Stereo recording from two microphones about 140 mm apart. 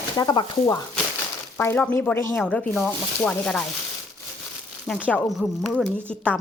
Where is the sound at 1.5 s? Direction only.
15° left (ahead or behind).